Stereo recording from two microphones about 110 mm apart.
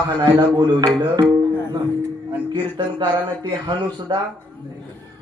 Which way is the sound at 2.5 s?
45° right (ahead or behind).